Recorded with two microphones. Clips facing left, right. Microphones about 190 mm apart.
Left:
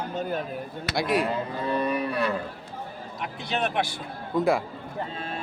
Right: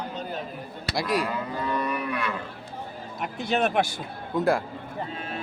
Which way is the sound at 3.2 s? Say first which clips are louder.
Right 4 dB; 45° right (ahead or behind).